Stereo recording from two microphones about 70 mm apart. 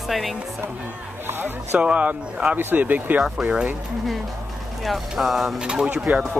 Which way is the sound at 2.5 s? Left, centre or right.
Right.